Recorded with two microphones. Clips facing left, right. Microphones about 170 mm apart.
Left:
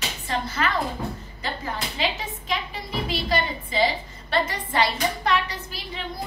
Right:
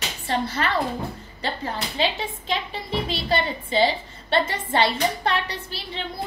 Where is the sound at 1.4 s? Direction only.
30° right (ahead or behind).